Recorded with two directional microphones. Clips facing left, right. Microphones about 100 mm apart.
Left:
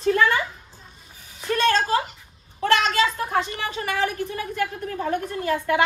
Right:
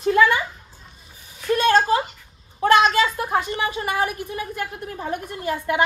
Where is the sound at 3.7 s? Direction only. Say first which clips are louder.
Right 1 dB; 20° right (ahead or behind).